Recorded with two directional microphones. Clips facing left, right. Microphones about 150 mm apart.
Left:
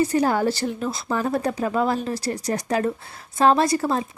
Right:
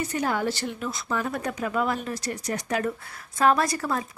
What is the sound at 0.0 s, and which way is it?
Speech, 35° left (ahead or behind).